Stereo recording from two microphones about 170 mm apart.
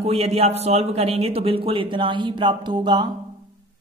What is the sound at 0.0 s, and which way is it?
Speech, 35° right (ahead or behind).